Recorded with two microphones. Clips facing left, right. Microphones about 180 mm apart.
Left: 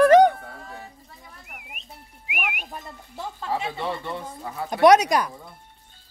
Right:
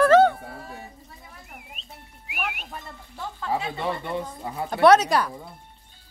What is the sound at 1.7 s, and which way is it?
Whistling, 15° left (ahead or behind).